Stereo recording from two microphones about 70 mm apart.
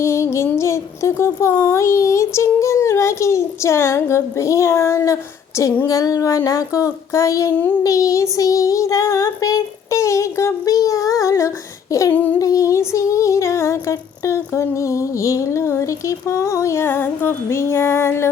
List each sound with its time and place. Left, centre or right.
0.0 s music: left
0.5 s speech: left
12.1 s music: left
12.4 s speech: left
16.8 s music: left
17.5 s female singing: left